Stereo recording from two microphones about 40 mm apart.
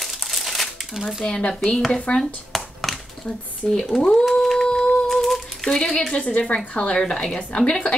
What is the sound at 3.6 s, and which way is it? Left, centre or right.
Speech, centre.